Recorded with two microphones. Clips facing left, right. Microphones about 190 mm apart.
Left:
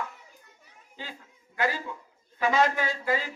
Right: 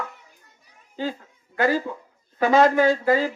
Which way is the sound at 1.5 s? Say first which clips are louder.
Right 8 dB; 45° right (ahead or behind).